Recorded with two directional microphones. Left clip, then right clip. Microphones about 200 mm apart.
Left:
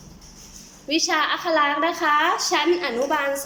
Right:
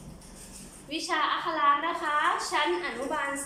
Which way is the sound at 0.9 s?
50° left (ahead or behind).